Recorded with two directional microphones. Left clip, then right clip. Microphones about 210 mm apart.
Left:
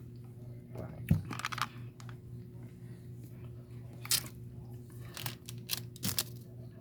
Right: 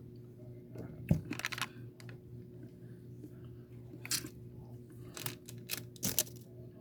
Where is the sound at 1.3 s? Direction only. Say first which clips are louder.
Left 4 dB; 5° right (ahead or behind).